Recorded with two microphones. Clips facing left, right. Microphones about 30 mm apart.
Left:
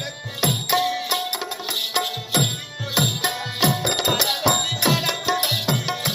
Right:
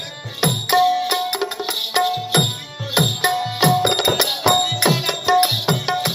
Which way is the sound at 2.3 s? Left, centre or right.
Right.